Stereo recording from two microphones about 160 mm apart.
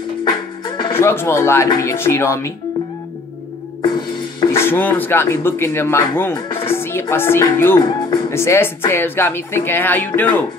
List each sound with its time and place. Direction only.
0.2 s music: 30° left (ahead or behind)
0.9 s speech: 15° left (ahead or behind)
3.8 s music: 30° left (ahead or behind)
4.5 s speech: 15° left (ahead or behind)
6.7 s music: 15° left (ahead or behind)
7.5 s speech: 15° left (ahead or behind)
7.8 s music: 35° left (ahead or behind)
8.3 s speech: 15° left (ahead or behind)